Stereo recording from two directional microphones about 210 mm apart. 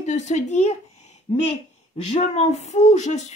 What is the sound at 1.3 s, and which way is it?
Speech, 30° left (ahead or behind).